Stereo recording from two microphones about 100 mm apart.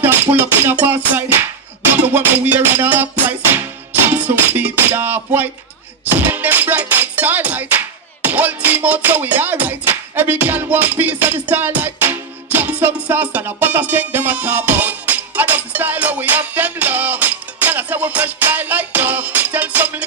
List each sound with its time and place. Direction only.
0.0 s music: 20° right (ahead or behind)